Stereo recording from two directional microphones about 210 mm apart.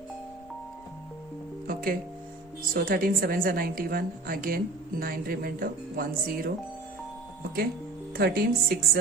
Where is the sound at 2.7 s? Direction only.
45° right (ahead or behind).